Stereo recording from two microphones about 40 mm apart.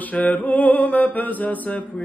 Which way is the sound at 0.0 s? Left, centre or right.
Left.